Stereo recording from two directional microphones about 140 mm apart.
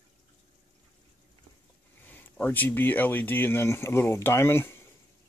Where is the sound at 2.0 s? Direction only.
15° left (ahead or behind).